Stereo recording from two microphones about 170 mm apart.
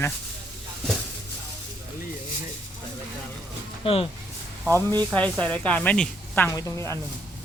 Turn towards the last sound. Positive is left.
turn(degrees=15)  # may be behind; listen again after turning